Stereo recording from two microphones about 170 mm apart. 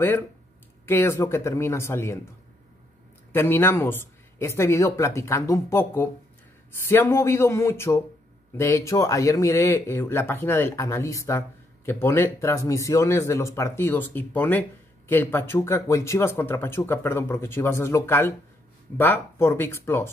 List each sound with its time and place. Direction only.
0.8 s speech: 15° left (ahead or behind)
3.3 s speech: 10° left (ahead or behind)